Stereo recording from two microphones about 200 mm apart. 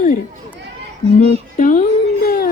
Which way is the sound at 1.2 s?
40° left (ahead or behind).